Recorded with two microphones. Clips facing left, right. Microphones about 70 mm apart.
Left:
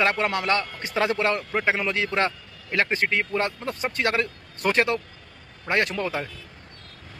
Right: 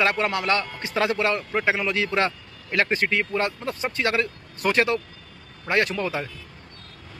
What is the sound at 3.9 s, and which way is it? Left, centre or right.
A man's voice, left.